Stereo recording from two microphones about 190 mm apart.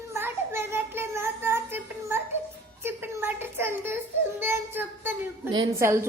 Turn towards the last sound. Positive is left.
turn(degrees=-15)  # may be behind; listen again after turning